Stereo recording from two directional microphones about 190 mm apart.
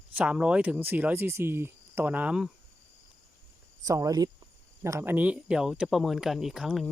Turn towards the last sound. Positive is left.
turn(degrees=0)  # may be behind; listen again after turning